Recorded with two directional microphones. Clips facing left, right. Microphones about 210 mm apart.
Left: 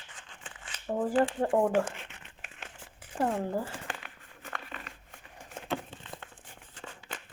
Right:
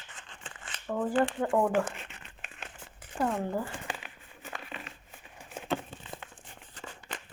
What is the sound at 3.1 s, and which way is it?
Speech, 30° left (ahead or behind).